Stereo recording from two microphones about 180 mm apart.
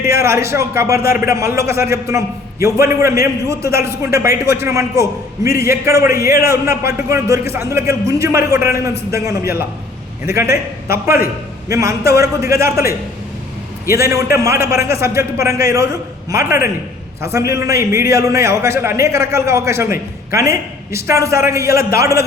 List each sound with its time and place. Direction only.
0.0 s a man's voice: 15° right (ahead or behind)
10.3 s a man's voice: 60° left (ahead or behind)
10.9 s a man's voice: 15° right (ahead or behind)
13.9 s a man's voice: 15° right (ahead or behind)